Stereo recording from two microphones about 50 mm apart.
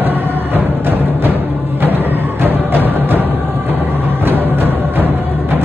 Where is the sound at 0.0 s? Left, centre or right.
Right.